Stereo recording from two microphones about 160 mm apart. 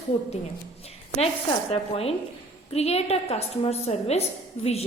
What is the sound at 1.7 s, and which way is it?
A woman's voice, 40° left (ahead or behind).